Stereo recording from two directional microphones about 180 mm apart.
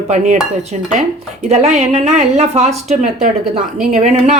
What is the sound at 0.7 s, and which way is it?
Speech, 40° right (ahead or behind).